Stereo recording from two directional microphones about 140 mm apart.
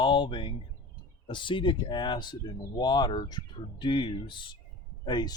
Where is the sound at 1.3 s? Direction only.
35° left (ahead or behind).